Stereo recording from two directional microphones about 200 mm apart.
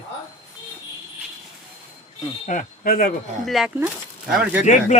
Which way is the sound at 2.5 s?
45° left (ahead or behind).